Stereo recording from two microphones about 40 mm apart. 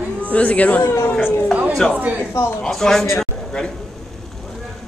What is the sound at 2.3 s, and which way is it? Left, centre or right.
Speech, left.